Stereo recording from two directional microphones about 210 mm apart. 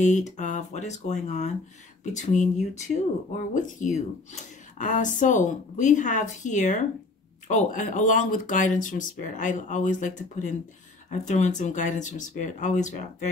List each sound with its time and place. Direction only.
0.0 s speech: 35° left (ahead or behind)